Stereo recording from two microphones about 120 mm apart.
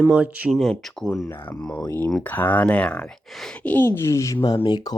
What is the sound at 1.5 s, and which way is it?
Speech, 10° left (ahead or behind).